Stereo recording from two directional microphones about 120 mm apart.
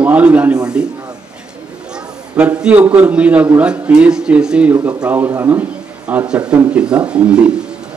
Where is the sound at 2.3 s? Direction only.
10° right (ahead or behind).